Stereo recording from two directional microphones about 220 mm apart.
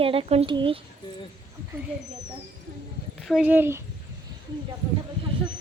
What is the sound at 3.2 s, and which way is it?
Speech, 5° right (ahead or behind).